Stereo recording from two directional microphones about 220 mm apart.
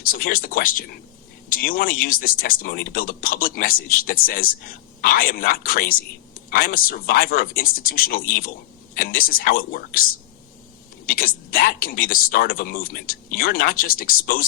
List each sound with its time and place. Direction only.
0.0 s speech: 40° left (ahead or behind)
11.0 s speech: 40° left (ahead or behind)